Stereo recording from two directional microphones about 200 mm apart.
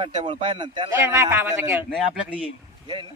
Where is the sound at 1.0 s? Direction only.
10° right (ahead or behind).